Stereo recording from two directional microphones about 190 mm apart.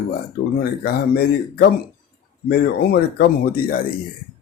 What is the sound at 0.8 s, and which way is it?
Speech, 55° left (ahead or behind).